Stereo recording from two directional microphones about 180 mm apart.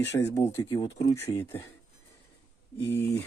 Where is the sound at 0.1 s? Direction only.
15° left (ahead or behind).